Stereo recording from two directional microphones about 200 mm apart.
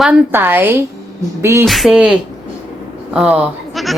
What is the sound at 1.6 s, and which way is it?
Speech, centre (ahead or behind).